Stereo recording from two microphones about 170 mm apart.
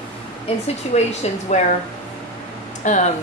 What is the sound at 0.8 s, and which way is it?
Speech, 40° left (ahead or behind).